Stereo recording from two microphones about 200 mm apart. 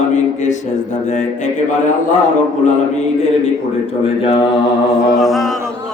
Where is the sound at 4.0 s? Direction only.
30° left (ahead or behind).